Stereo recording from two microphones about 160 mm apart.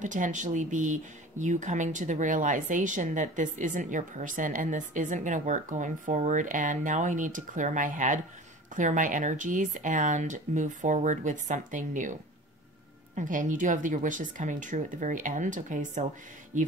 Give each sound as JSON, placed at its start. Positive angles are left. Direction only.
{"t": 0.0, "sound": "speech", "side_deg": -50}